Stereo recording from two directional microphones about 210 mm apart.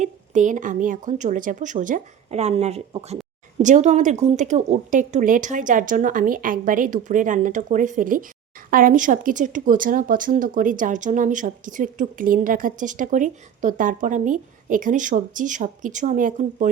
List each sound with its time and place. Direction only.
0.0 s a woman's voice: 35° right (ahead or behind)